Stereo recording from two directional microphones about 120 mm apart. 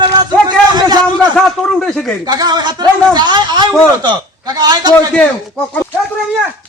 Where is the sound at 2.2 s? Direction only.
35° right (ahead or behind).